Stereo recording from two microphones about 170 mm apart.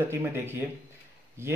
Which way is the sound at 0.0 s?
15° right (ahead or behind).